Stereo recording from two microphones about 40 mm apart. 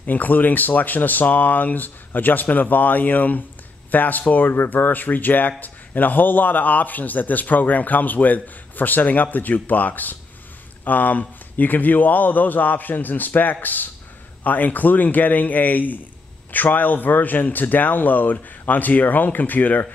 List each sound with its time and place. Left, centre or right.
0.0 s a man's voice: left